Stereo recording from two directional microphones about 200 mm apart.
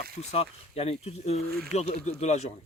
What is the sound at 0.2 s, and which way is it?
Speech, 30° left (ahead or behind).